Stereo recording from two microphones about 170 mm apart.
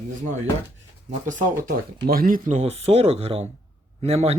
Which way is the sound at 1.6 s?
60° right (ahead or behind).